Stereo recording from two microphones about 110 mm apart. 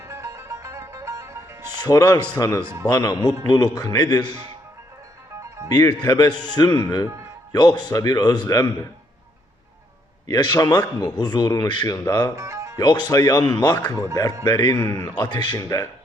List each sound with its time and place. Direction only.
0.0 s music: 25° right (ahead or behind)
1.8 s a man's voice: 35° left (ahead or behind)
5.6 s a man's voice: 40° left (ahead or behind)
10.2 s a man's voice: 40° left (ahead or behind)
12.4 s music: 25° right (ahead or behind)
12.7 s a man's voice: 40° left (ahead or behind)
14.8 s a man's voice: 25° left (ahead or behind)
15.1 s speech: 45° left (ahead or behind)
15.5 s a man's voice: 30° left (ahead or behind)